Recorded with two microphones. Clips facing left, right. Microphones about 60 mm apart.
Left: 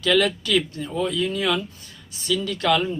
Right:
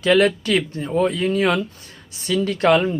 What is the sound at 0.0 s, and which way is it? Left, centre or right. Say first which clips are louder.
A man's voice: right 4 dB; right.